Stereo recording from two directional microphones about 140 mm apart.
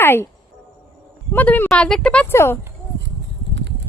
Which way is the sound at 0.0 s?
15° left (ahead or behind).